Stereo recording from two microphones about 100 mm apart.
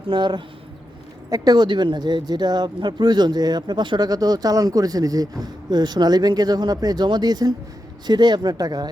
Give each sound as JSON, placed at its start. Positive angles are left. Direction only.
{"t": 0.1, "sound": "speech", "side_deg": -50}